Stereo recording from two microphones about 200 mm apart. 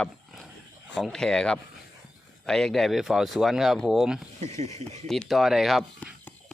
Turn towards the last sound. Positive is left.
turn(degrees=5)  # may be behind; listen again after turning